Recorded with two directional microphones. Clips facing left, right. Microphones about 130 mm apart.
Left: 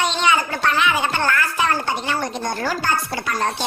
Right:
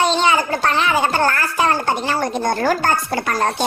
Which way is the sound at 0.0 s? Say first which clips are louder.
Right 3 dB; 35° right (ahead or behind).